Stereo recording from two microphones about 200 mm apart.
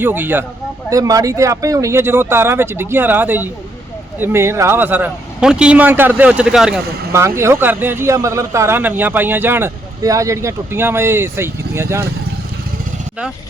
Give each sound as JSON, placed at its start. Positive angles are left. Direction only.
{"t": 0.0, "sound": "speech", "side_deg": -10}
{"t": 7.1, "sound": "speech", "side_deg": -15}